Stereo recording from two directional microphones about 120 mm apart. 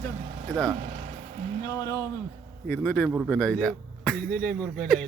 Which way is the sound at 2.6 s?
15° left (ahead or behind).